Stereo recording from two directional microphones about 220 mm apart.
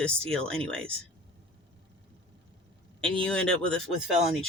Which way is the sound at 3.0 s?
5° left (ahead or behind).